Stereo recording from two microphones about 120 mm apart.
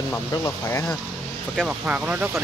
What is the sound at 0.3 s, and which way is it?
Speech, 25° left (ahead or behind).